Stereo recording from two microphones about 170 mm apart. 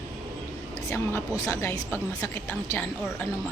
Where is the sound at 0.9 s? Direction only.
15° left (ahead or behind).